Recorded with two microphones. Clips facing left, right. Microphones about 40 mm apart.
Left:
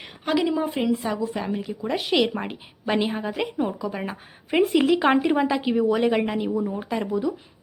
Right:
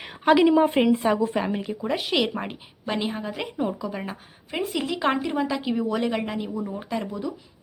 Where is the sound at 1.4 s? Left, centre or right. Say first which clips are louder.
Right 2 dB; centre.